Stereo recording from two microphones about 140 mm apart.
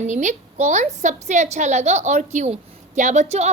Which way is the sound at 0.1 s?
60° right (ahead or behind).